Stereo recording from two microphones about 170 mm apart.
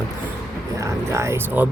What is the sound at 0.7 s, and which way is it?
Speech, 15° right (ahead or behind).